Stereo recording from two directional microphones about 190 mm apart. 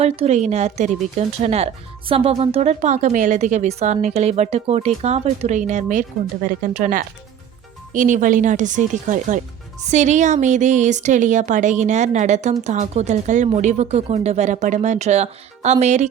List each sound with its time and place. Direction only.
0.0 s speech: 35° right (ahead or behind)